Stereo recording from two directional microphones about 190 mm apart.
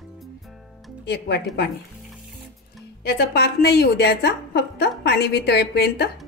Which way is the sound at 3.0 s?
60° left (ahead or behind).